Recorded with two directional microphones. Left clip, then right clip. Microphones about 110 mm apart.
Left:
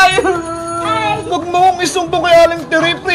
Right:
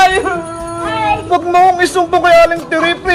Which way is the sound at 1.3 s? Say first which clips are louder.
Right 3 dB; 30° right (ahead or behind).